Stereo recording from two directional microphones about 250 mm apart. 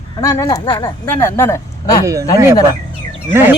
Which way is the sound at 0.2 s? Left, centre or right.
Centre.